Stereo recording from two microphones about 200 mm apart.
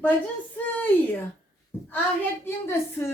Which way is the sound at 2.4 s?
10° left (ahead or behind).